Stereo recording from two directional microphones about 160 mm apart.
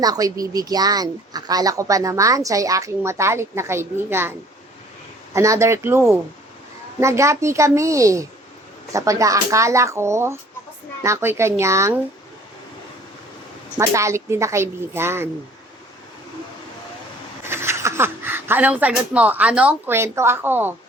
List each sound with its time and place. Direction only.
0.0 s a woman's voice: 25° right (ahead or behind)
13.7 s a woman's voice: 20° right (ahead or behind)
17.4 s speech: 15° right (ahead or behind)